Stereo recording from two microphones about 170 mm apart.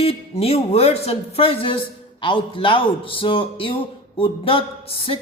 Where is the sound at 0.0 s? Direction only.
35° left (ahead or behind).